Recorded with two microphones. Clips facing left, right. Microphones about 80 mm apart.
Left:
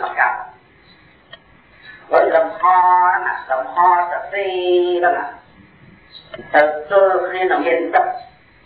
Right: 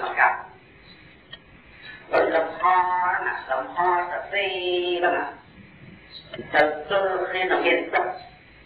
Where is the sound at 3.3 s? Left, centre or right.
Left.